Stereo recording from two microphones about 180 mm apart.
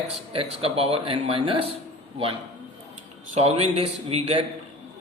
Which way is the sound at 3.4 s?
35° right (ahead or behind).